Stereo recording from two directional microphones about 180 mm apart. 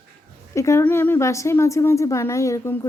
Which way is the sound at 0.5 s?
15° left (ahead or behind).